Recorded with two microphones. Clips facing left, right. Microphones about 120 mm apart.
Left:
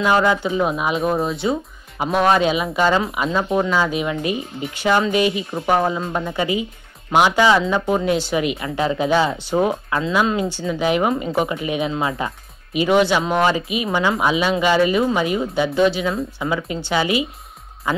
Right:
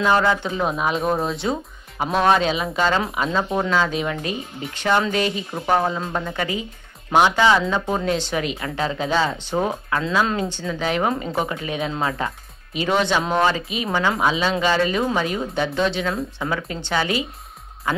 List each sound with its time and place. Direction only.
0.0 s speech: 10° left (ahead or behind)
11.8 s speech: centre (ahead or behind)